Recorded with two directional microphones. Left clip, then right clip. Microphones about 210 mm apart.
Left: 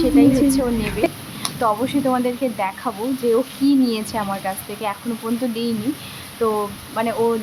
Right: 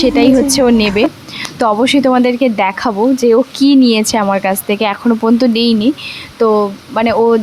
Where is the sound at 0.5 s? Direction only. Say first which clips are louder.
Right 11 dB; 45° right (ahead or behind).